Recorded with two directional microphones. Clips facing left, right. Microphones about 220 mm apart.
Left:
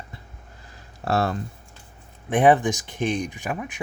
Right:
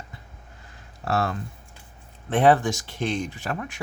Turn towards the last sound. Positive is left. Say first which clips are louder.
# left 1 dB
turn(degrees=15)  # may be behind; listen again after turning